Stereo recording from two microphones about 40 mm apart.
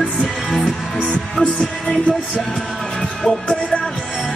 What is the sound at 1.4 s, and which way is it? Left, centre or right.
Music, left.